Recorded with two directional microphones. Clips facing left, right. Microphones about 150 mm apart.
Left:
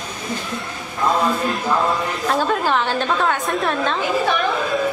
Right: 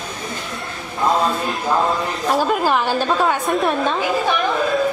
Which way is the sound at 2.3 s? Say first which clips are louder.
Right 2 dB; 10° right (ahead or behind).